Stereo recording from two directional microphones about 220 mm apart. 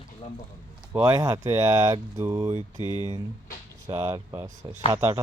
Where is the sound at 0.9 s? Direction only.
15° right (ahead or behind).